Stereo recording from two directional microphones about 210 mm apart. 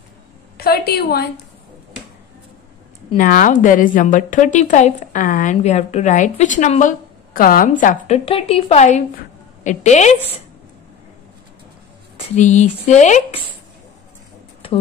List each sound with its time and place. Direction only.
0.6 s a woman's voice: 45° left (ahead or behind)
3.2 s a woman's voice: 40° left (ahead or behind)
8.3 s a woman's voice: 25° left (ahead or behind)
12.4 s a woman's voice: 35° left (ahead or behind)
14.6 s a sound: 25° left (ahead or behind)